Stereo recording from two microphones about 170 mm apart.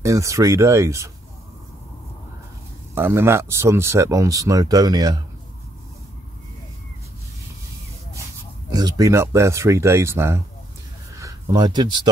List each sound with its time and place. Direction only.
0.0 s speech: 20° right (ahead or behind)
2.9 s speech: 15° right (ahead or behind)
8.7 s speech: 20° right (ahead or behind)